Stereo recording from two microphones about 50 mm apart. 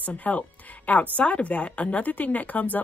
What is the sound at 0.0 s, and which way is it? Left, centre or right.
A woman's voice, left.